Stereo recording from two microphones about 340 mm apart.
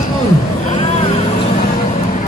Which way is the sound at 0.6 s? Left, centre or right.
Centre.